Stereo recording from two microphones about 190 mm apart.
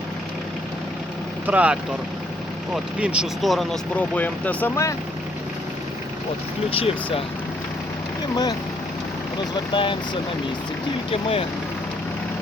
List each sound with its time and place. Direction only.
1.5 s speech: 5° right (ahead or behind); by 4.9 s 15° left (ahead or behind)
6.7 s speech: 30° left (ahead or behind)
9.7 s speech: 25° left (ahead or behind)
11.1 s speech: 30° left (ahead or behind)